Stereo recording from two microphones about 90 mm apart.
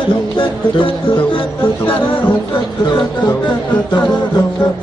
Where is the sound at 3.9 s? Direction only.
50° left (ahead or behind).